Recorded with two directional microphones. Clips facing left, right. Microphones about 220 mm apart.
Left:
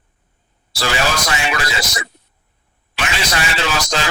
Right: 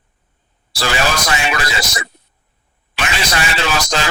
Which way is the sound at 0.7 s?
50° right (ahead or behind).